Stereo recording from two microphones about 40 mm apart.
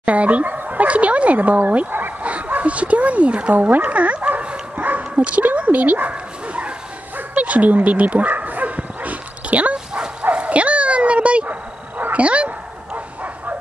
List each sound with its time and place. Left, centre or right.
0.0 s speech: right
1.9 s dog: right
2.2 s speech: right
3.5 s dog: right
5.1 s speech: right
5.7 s dog: right
10.3 s bow-wow: right
12.0 s dog: right